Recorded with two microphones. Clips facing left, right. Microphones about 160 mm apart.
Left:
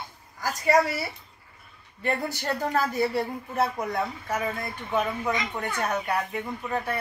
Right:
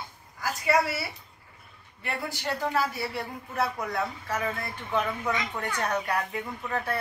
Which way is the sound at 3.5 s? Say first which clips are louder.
Left 2 dB; 25° left (ahead or behind).